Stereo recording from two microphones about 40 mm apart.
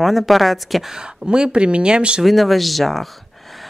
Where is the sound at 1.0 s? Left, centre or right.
Right.